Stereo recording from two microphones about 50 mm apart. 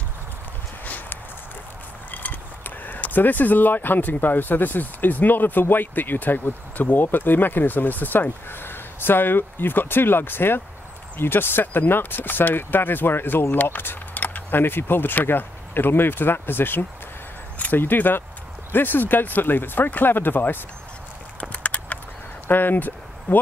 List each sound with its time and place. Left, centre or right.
0.8 s clip-clop: left
2.0 s speech: left
14.6 s speech: left
21.4 s a sound: left
22.5 s speech: left